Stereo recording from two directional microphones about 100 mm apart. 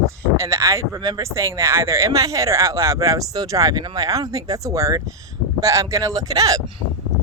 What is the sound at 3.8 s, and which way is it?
Speech, 45° right (ahead or behind).